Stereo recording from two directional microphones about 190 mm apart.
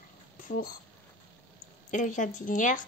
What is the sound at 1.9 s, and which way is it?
Speech, 40° left (ahead or behind).